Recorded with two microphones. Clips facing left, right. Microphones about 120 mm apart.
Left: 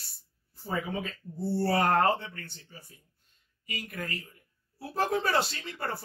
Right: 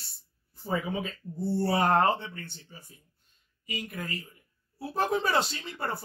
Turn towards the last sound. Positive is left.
turn(degrees=-25)  # may be behind; listen again after turning